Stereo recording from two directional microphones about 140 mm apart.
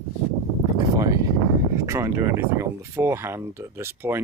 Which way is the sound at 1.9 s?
20° right (ahead or behind).